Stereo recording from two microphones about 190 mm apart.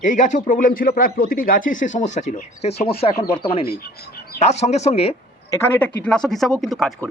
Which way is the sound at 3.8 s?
50° left (ahead or behind).